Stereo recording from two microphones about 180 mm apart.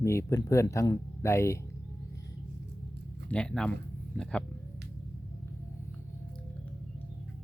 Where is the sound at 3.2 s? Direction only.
5° left (ahead or behind).